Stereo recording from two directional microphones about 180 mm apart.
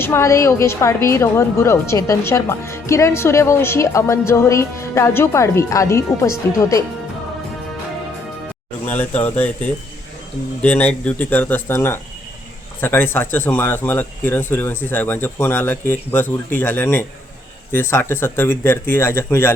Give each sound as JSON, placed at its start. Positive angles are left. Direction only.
{"t": 0.0, "sound": "speech", "side_deg": 15}
{"t": 8.9, "sound": "speech", "side_deg": 10}